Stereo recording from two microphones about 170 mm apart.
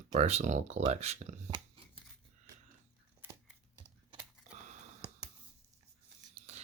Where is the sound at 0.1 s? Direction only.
40° right (ahead or behind).